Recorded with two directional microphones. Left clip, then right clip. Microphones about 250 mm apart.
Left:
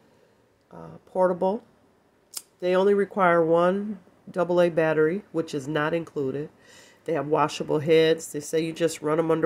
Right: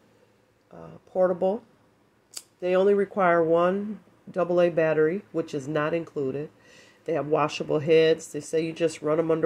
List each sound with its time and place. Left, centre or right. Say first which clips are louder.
0.7 s speech: left 1 dB; centre